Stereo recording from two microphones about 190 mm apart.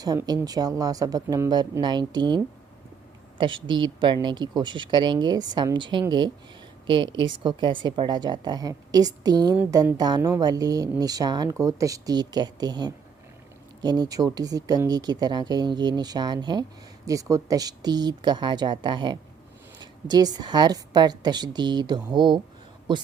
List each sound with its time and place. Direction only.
0.0 s a woman's voice: 20° right (ahead or behind)